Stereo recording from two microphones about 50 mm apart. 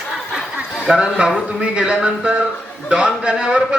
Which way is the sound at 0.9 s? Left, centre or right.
Centre.